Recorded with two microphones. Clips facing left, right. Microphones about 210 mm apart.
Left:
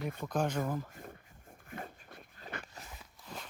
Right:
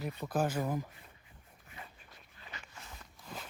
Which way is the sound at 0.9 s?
50° left (ahead or behind).